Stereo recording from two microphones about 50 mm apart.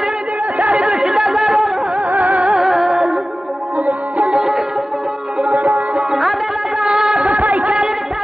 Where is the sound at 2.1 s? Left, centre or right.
Right.